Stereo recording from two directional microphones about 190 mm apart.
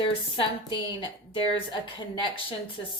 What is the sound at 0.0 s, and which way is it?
A woman's voice, 25° left (ahead or behind).